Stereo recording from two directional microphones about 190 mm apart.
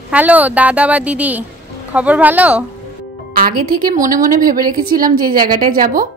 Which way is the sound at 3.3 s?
50° right (ahead or behind).